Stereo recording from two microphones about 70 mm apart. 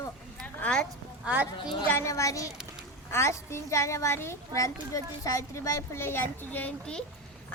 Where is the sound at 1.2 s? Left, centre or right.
Right.